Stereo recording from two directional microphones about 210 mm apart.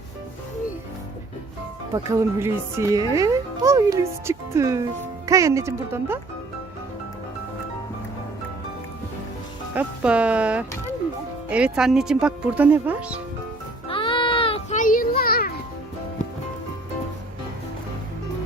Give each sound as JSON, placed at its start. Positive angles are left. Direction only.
{"t": 1.9, "sound": "speech", "side_deg": -15}
{"t": 9.7, "sound": "speech", "side_deg": -5}
{"t": 13.8, "sound": "a sound", "side_deg": 25}